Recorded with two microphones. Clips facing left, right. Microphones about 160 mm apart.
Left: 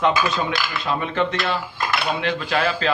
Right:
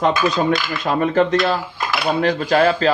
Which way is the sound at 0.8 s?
45° right (ahead or behind).